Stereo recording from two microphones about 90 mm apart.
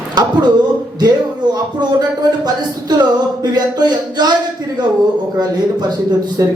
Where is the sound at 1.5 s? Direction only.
50° right (ahead or behind).